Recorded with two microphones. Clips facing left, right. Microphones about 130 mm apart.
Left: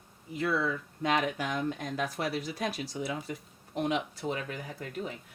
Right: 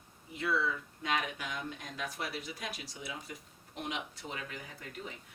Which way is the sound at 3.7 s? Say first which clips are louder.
Left 9 dB; 40° left (ahead or behind).